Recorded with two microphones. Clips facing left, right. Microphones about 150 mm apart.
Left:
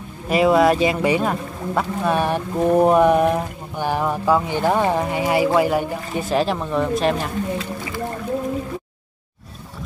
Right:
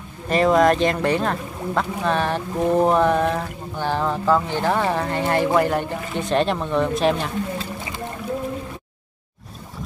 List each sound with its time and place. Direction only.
0.3 s speech: 5° left (ahead or behind)
7.5 s boat: 25° right (ahead or behind)